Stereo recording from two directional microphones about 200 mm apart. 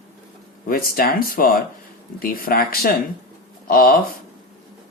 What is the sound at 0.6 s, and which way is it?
Speech, 45° left (ahead or behind).